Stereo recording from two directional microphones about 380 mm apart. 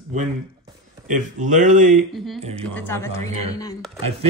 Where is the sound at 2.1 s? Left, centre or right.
Centre.